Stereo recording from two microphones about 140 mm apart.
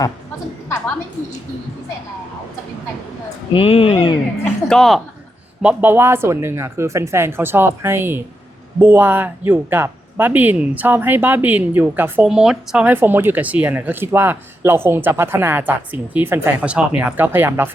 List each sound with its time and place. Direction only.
3.5 s speech: 40° left (ahead or behind)
4.7 s speech: centre (ahead or behind)
5.6 s speech: 15° right (ahead or behind)